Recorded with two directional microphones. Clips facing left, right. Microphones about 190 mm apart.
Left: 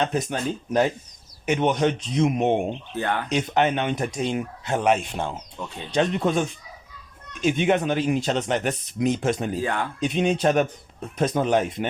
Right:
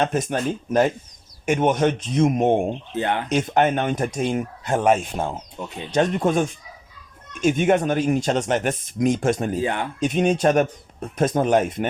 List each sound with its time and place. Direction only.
0.0 s speech: 50° right (ahead or behind)
2.9 s speech: 20° right (ahead or behind)
3.2 s speech: 50° right (ahead or behind)
5.6 s speech: 20° right (ahead or behind)
5.9 s speech: 45° right (ahead or behind)
7.4 s speech: 45° right (ahead or behind)
9.6 s speech: 20° right (ahead or behind)
10.0 s speech: 45° right (ahead or behind)